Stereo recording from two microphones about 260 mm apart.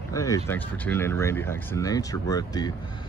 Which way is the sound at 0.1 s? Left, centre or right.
Centre.